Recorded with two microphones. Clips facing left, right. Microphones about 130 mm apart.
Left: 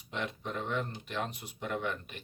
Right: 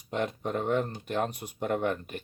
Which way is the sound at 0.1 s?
45° right (ahead or behind).